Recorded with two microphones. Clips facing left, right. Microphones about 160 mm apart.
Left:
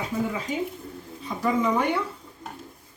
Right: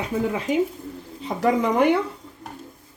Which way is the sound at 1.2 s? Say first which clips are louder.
Right 4 dB; 70° right (ahead or behind).